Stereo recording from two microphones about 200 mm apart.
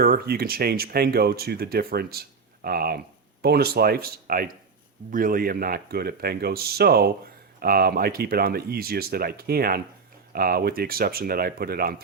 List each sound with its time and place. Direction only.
0.0 s speech: 50° right (ahead or behind)